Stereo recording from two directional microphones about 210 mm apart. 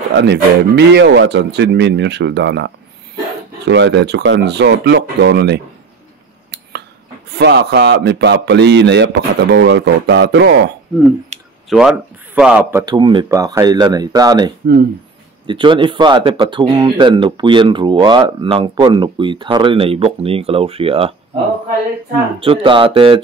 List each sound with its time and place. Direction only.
0.1 s a man's voice: 55° right (ahead or behind)
7.2 s a man's voice: 50° right (ahead or behind)
11.3 s a sound: 30° right (ahead or behind)
11.7 s speech: centre (ahead or behind)
12.8 s speech: 20° right (ahead or behind)
22.4 s speech: 25° right (ahead or behind)